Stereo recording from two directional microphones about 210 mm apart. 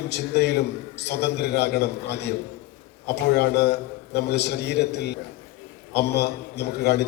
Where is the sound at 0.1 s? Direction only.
50° left (ahead or behind).